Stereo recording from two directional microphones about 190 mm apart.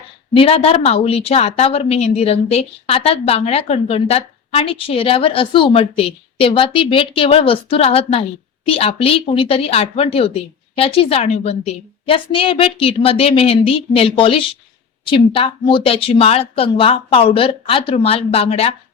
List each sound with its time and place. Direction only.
0.3 s speech: 30° left (ahead or behind)